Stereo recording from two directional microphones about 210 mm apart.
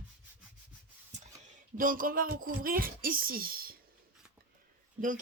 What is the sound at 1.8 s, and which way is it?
Speech, 40° right (ahead or behind).